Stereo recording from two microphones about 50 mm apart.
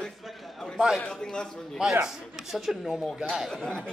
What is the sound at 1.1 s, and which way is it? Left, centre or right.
Speech, centre.